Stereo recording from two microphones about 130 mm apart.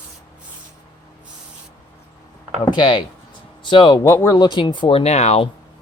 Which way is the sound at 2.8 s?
40° left (ahead or behind).